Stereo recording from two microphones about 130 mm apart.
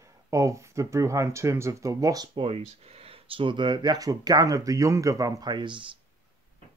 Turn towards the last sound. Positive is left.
turn(degrees=-40)  # may be behind; listen again after turning